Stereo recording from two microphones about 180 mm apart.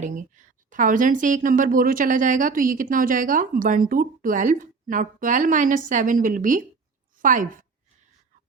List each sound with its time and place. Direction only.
0.0 s a woman's voice: 45° right (ahead or behind)